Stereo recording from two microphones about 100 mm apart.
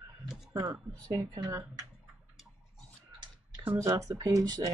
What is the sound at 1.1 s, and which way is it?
Speech, 35° right (ahead or behind).